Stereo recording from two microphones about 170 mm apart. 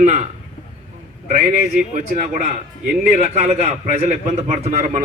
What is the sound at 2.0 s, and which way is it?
A man's voice, 45° right (ahead or behind).